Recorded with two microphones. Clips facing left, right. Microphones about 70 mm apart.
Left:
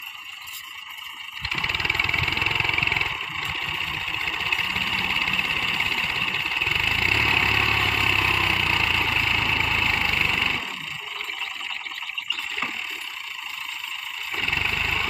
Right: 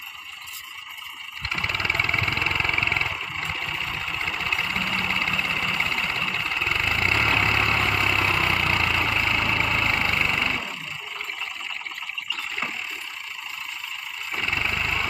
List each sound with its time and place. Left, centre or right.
1.4 s vehicle: right
14.3 s vehicle: centre